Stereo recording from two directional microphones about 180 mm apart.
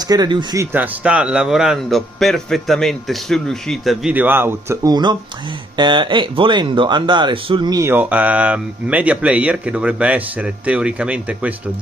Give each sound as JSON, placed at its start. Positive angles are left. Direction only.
{"t": 0.1, "sound": "speech", "side_deg": -25}
{"t": 0.7, "sound": "a man's voice", "side_deg": -5}